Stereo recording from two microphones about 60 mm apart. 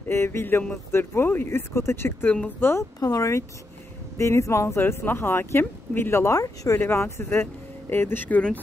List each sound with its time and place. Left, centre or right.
0.1 s speech: left
3.0 s speech: left
4.2 s speech: left